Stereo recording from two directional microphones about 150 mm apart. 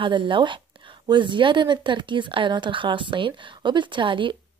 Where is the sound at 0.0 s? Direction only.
35° right (ahead or behind).